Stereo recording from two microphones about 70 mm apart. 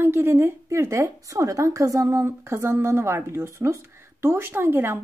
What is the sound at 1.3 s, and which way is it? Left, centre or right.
A woman's voice, right.